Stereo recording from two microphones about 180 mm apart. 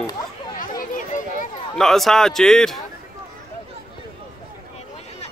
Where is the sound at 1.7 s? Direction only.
Centre (ahead or behind).